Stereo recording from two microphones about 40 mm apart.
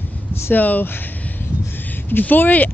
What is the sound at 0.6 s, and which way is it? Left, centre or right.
Speech, left.